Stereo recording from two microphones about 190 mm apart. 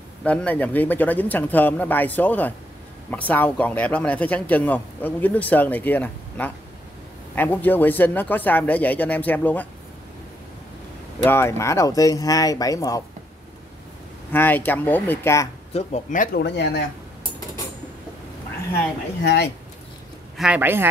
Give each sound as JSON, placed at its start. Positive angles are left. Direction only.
{"t": 0.2, "sound": "speech", "side_deg": 5}
{"t": 11.2, "sound": "speech", "side_deg": 10}
{"t": 14.3, "sound": "speech", "side_deg": 10}
{"t": 15.7, "sound": "speech", "side_deg": 40}
{"t": 19.2, "sound": "speech", "side_deg": 60}
{"t": 20.3, "sound": "speech", "side_deg": -5}